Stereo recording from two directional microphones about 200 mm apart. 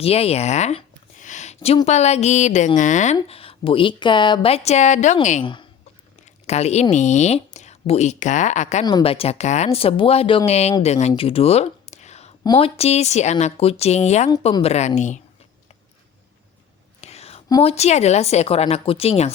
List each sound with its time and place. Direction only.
0.0 s a woman's voice: 30° left (ahead or behind)
5.4 s a woman's voice: 25° left (ahead or behind)
6.2 s a sound: 35° left (ahead or behind)
6.9 s speech: 35° left (ahead or behind)
8.8 s a woman's voice: 20° left (ahead or behind)
11.1 s a sound: 30° left (ahead or behind)
12.4 s speech: 25° left (ahead or behind)
17.0 s whispering: 30° left (ahead or behind)
17.5 s speech: 30° left (ahead or behind)